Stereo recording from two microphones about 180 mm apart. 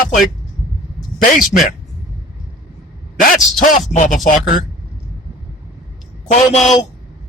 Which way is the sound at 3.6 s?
45° left (ahead or behind).